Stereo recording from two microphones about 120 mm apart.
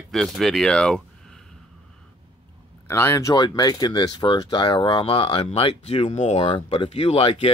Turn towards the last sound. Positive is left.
turn(degrees=50)  # may be behind; listen again after turning